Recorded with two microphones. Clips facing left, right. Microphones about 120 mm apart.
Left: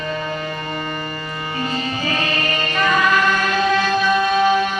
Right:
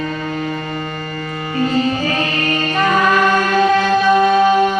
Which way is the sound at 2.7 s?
40° right (ahead or behind).